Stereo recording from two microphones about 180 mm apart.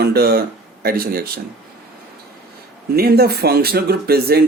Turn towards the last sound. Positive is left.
turn(degrees=-60)  # may be behind; listen again after turning